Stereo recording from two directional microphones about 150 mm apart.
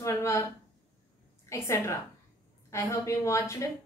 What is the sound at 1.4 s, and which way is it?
A woman's voice, 20° left (ahead or behind).